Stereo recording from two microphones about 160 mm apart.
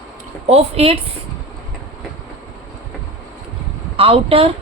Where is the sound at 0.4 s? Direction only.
40° right (ahead or behind).